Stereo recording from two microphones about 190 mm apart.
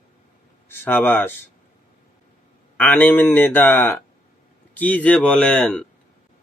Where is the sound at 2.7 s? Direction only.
10° left (ahead or behind).